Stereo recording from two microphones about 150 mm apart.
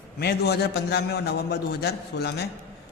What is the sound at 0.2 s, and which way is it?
A man's voice, 90° left.